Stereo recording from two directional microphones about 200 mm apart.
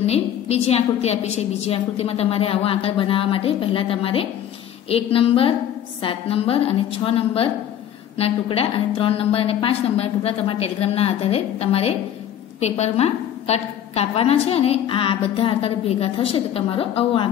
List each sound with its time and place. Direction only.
0.0 s a woman's voice: 30° left (ahead or behind)